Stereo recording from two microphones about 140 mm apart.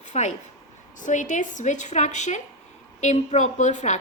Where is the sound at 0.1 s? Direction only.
55° left (ahead or behind).